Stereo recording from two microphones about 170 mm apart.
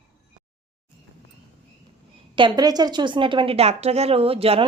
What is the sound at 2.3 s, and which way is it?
A woman's voice, 25° right (ahead or behind).